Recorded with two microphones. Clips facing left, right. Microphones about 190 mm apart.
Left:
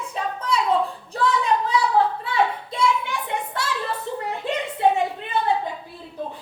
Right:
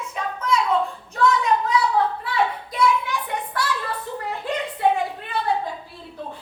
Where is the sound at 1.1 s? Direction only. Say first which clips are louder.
Right 2 dB; 30° left (ahead or behind).